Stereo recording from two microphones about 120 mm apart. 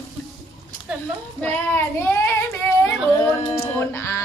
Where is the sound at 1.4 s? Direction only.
15° left (ahead or behind).